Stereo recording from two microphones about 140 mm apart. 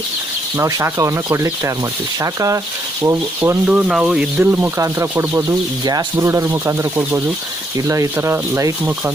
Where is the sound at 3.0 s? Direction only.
20° right (ahead or behind).